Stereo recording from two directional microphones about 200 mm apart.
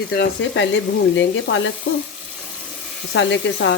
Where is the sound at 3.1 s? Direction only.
65° left (ahead or behind).